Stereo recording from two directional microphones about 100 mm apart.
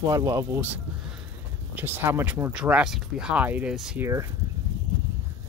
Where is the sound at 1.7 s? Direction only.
20° right (ahead or behind).